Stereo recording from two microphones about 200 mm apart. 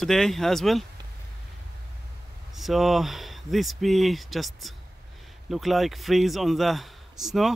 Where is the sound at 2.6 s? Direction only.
Centre (ahead or behind).